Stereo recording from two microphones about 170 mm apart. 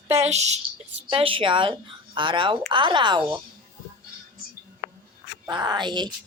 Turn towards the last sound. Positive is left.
turn(degrees=-25)  # may be behind; listen again after turning